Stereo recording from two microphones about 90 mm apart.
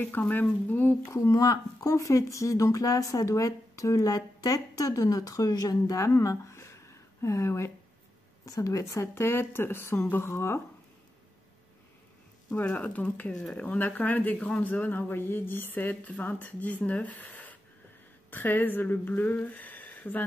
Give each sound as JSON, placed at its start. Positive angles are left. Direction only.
{"t": 0.0, "sound": "speech", "side_deg": 20}
{"t": 1.1, "sound": "speech", "side_deg": 40}
{"t": 12.5, "sound": "speech", "side_deg": 15}